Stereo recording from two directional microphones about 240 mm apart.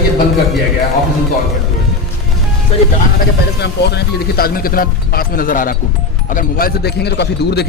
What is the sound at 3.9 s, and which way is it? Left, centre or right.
A man's voice, left.